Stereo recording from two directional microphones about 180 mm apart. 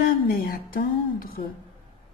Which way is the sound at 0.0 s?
55° left (ahead or behind).